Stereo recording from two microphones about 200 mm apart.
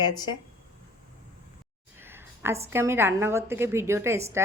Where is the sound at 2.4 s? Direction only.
10° right (ahead or behind).